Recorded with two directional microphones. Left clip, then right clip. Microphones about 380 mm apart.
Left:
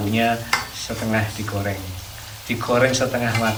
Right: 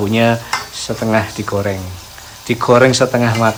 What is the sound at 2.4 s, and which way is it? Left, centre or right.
Speech, centre.